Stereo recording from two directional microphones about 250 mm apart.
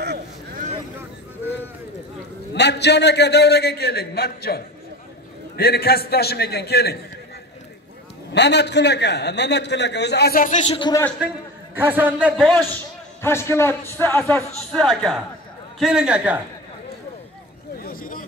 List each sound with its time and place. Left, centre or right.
0.0 s a sound: right
2.5 s a man's voice: left
8.3 s a man's voice: left
10.8 s a man's voice: centre
11.8 s speech: centre
13.2 s a man's voice: centre
17.7 s vehicle: left